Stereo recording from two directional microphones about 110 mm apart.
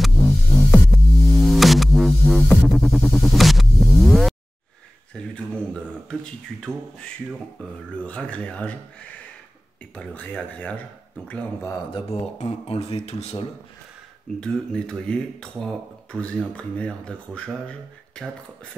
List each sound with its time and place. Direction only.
0.0 s music: centre (ahead or behind)
5.1 s speech: 10° left (ahead or behind)
8.0 s speech: 10° left (ahead or behind)
9.9 s speech: 10° left (ahead or behind)
11.9 s speech: 70° left (ahead or behind)
14.4 s speech: 5° left (ahead or behind)